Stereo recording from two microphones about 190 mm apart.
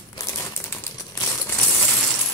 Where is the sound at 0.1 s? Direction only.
15° left (ahead or behind).